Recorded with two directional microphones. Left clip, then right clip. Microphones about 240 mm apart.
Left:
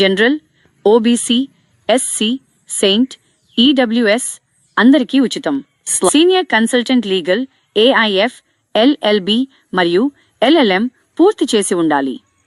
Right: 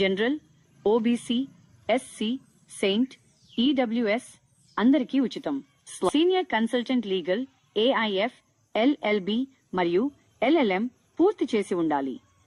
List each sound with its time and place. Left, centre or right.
0.0 s a woman's voice: left